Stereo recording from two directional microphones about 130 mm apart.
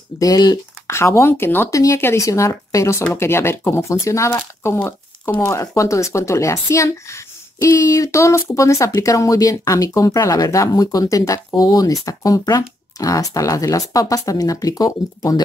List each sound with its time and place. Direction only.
0.2 s speech: 30° left (ahead or behind)